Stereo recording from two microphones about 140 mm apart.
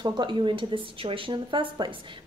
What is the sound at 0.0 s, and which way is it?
Speech, 35° right (ahead or behind).